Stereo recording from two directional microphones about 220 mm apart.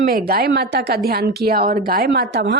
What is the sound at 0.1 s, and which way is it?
A woman's voice, 45° right (ahead or behind).